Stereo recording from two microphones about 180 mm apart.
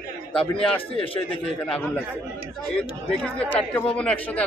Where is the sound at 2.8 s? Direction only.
5° left (ahead or behind).